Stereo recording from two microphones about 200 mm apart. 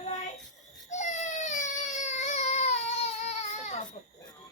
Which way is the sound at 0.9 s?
35° left (ahead or behind).